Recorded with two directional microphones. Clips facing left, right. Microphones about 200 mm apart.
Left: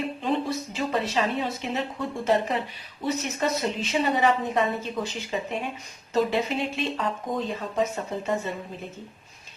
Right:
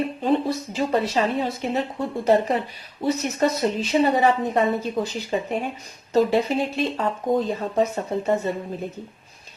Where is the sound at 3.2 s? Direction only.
40° right (ahead or behind).